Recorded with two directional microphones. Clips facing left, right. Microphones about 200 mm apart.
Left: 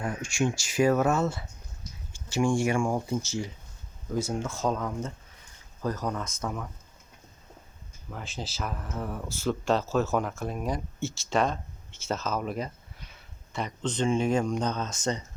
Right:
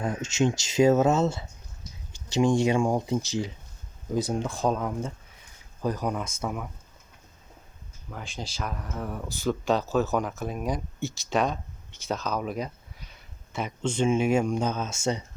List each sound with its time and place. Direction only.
0.0 s speech: 20° right (ahead or behind)
8.1 s speech: centre (ahead or behind)